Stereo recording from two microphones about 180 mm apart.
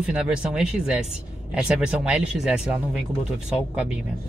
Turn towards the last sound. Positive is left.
turn(degrees=-5)  # may be behind; listen again after turning